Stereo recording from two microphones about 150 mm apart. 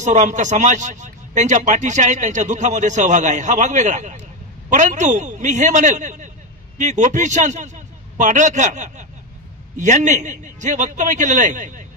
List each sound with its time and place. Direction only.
0.0 s a man's voice: 55° right (ahead or behind)